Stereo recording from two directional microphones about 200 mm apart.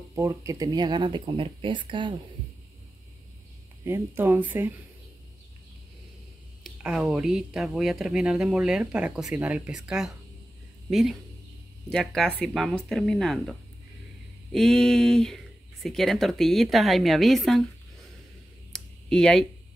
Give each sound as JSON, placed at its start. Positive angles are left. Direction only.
{"t": 0.1, "sound": "speech", "side_deg": -15}
{"t": 3.8, "sound": "speech", "side_deg": -10}
{"t": 6.6, "sound": "speech", "side_deg": -5}
{"t": 18.7, "sound": "a sound", "side_deg": 5}